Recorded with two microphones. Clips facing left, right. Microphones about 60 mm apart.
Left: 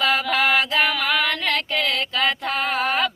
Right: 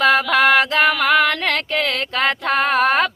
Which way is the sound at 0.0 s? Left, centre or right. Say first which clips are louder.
Right 6 dB; right.